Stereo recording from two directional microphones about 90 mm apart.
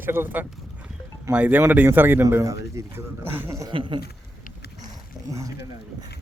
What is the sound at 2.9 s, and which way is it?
Speech, 25° right (ahead or behind).